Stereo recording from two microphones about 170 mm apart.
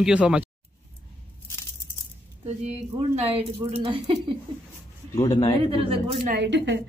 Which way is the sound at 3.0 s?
35° right (ahead or behind).